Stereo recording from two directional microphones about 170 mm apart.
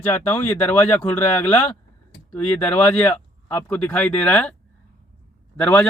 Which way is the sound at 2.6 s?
10° left (ahead or behind).